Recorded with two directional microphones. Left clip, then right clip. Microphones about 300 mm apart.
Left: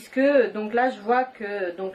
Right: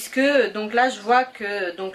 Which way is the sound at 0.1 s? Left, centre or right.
Centre.